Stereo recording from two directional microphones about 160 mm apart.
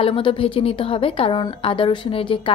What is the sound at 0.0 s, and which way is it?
A woman's voice, 35° left (ahead or behind).